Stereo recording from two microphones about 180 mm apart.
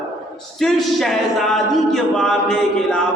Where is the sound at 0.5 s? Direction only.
Centre (ahead or behind).